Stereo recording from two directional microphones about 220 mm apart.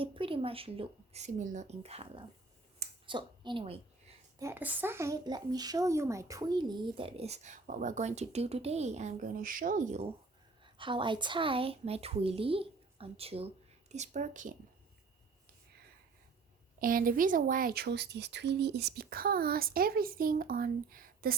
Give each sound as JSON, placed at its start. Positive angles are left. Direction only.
{"t": 0.0, "sound": "speech", "side_deg": -25}
{"t": 2.7, "sound": "a sound", "side_deg": -25}
{"t": 4.4, "sound": "speech", "side_deg": -10}
{"t": 16.8, "sound": "speech", "side_deg": -40}